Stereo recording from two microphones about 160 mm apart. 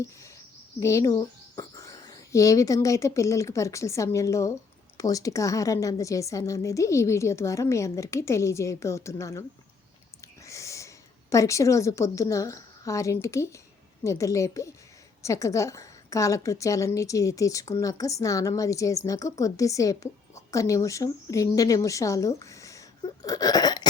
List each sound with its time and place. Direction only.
0.8 s a woman's voice: 20° left (ahead or behind)
10.4 s a woman's voice: 20° left (ahead or behind)